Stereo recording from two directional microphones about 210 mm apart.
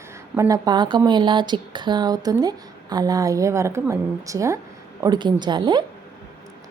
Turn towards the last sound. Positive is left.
turn(degrees=-20)  # may be behind; listen again after turning